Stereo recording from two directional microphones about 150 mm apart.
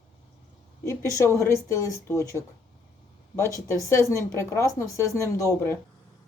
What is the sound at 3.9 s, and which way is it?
A woman's voice, 20° left (ahead or behind).